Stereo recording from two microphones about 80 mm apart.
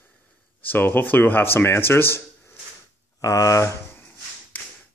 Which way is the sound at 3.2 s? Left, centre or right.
Left.